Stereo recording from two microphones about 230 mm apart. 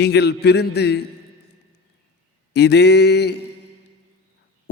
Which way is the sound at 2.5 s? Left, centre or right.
Left.